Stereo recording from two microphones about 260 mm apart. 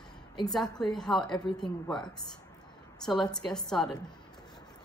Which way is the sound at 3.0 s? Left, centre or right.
Centre.